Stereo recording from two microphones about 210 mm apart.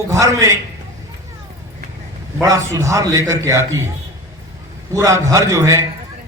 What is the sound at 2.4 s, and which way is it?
A man's voice, 15° right (ahead or behind).